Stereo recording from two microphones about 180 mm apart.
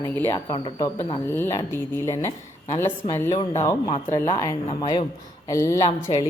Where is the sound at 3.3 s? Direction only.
40° left (ahead or behind).